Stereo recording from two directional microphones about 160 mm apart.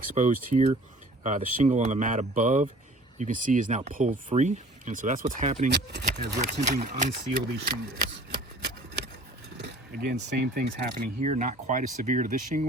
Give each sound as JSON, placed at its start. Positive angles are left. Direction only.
{"t": 0.0, "sound": "speech", "side_deg": -55}
{"t": 5.7, "sound": "speech", "side_deg": -90}
{"t": 6.6, "sound": "speech", "side_deg": -45}
{"t": 7.5, "sound": "speech", "side_deg": -80}
{"t": 10.3, "sound": "speech", "side_deg": -90}
{"t": 11.0, "sound": "speech", "side_deg": -50}